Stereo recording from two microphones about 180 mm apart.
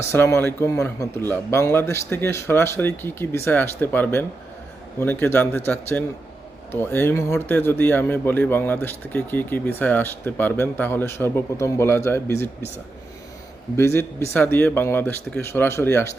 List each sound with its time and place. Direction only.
0.0 s a man's voice: 15° left (ahead or behind)
13.7 s a man's voice: 15° left (ahead or behind)